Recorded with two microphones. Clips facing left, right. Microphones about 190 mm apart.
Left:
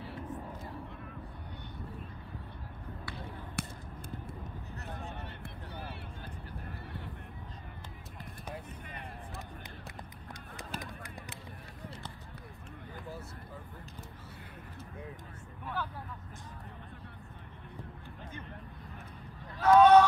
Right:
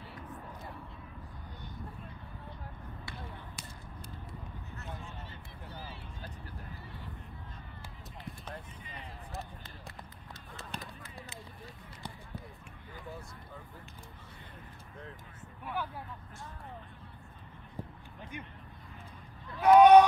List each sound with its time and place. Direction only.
3.6 s a sound: 65° left (ahead or behind)
5.1 s a sound: 65° left (ahead or behind)
8.8 s vehicle: 60° left (ahead or behind)
10.7 s run: 5° left (ahead or behind)
15.6 s vehicle: 15° right (ahead or behind)
19.6 s vehicle: 15° right (ahead or behind)